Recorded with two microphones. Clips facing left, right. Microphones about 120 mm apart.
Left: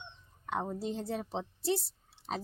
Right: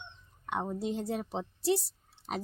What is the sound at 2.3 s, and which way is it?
Speech, 30° left (ahead or behind).